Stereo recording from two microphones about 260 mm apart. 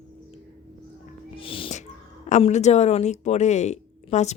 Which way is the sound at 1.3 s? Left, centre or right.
Left.